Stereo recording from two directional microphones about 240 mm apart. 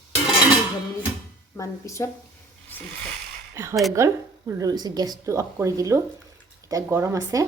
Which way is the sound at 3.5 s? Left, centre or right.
Centre.